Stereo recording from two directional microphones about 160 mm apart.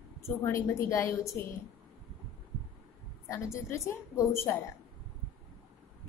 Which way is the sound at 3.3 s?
15° left (ahead or behind).